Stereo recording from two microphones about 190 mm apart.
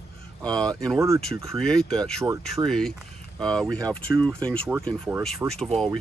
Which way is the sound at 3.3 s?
5° left (ahead or behind).